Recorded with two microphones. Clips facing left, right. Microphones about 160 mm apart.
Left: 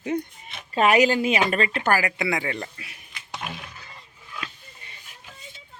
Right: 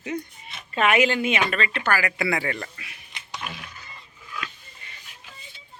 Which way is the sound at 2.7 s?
40° left (ahead or behind).